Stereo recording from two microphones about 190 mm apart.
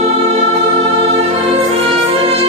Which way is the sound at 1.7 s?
35° right (ahead or behind).